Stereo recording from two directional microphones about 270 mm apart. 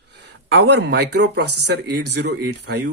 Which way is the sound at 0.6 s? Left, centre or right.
Right.